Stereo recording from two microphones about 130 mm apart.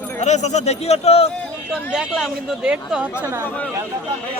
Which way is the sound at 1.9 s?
Centre (ahead or behind).